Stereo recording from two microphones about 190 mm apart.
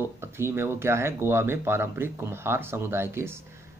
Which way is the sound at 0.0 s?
15° right (ahead or behind).